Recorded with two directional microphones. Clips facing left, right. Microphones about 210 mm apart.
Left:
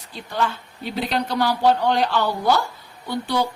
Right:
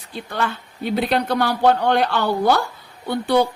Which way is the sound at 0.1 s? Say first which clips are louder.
Even; 55° right (ahead or behind).